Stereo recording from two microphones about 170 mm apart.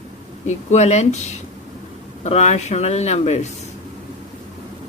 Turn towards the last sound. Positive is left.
turn(degrees=40)  # may be behind; listen again after turning